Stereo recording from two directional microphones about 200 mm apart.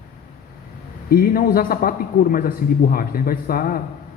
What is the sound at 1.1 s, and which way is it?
A man's voice, 45° left (ahead or behind).